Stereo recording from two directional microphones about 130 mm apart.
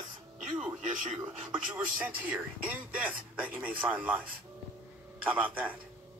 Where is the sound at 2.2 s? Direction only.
15° right (ahead or behind).